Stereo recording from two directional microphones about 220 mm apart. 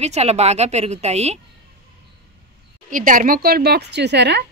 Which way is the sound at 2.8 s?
35° right (ahead or behind).